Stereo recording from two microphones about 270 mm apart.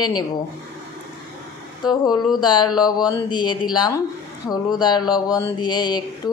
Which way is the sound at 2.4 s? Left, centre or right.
Centre.